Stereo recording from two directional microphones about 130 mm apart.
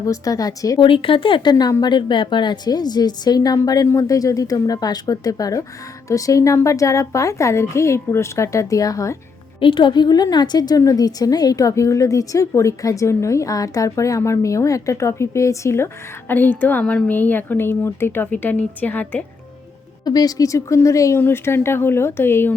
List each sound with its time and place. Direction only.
0.0 s a woman's voice: 25° left (ahead or behind)
0.8 s a woman's voice: 40° left (ahead or behind); by 9.1 s 25° left (ahead or behind)
9.6 s a woman's voice: 40° left (ahead or behind); by 19.2 s 15° left (ahead or behind)
20.1 s a woman's voice: 30° left (ahead or behind)